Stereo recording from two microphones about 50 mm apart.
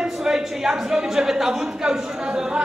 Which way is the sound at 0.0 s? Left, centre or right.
Centre.